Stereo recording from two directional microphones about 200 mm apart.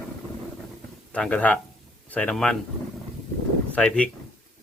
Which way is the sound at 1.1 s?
5° left (ahead or behind).